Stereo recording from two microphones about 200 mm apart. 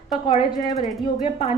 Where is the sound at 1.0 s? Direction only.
30° left (ahead or behind).